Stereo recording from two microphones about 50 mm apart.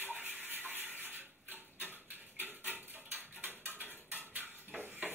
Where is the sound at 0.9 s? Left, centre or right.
Right.